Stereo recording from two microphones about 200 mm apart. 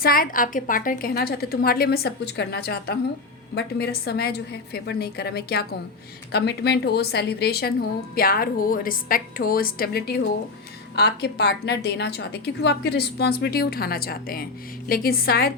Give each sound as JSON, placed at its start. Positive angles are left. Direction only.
{"t": 0.0, "sound": "a woman's voice", "side_deg": 45}